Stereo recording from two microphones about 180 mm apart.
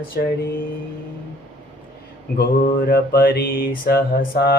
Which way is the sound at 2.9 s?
55° left (ahead or behind).